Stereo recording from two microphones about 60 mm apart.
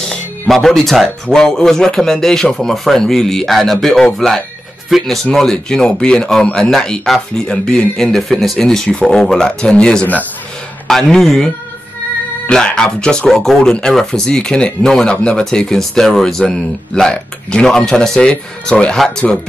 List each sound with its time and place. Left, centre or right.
0.0 s music: centre
1.2 s speech: centre